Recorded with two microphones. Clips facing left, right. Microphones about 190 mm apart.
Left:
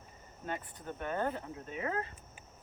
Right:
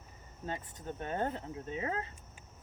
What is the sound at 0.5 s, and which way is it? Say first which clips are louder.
Speech: left 1 dB; 25° right (ahead or behind).